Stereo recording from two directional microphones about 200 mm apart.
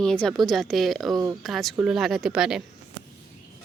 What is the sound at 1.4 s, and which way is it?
Speech, centre (ahead or behind).